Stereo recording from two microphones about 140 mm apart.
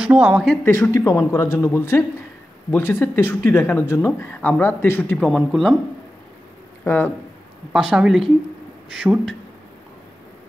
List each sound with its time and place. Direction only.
0.0 s speech: 10° right (ahead or behind)
0.7 s speech: 20° left (ahead or behind)
5.2 s speech: 5° left (ahead or behind)
6.8 s speech: 15° left (ahead or behind)
7.7 s speech: 5° right (ahead or behind)